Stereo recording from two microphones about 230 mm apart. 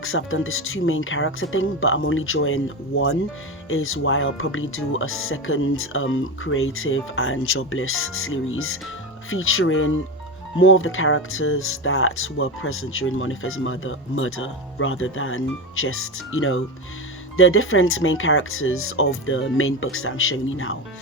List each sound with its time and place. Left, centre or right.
0.0 s speech: left